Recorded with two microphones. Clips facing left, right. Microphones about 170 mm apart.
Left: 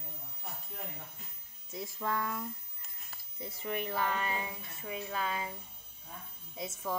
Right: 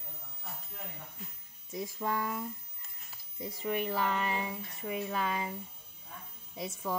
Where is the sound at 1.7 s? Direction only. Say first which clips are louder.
Right 2 dB; 15° right (ahead or behind).